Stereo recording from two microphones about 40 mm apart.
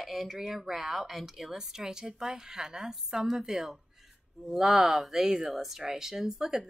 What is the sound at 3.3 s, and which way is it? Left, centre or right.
Speech, centre.